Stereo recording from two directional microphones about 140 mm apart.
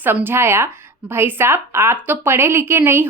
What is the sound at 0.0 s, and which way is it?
A woman's voice, 15° right (ahead or behind).